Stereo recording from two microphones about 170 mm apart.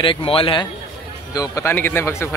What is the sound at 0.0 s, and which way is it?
Speech, 30° left (ahead or behind).